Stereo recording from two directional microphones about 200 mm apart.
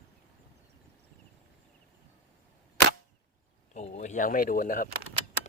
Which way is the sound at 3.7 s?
35° left (ahead or behind).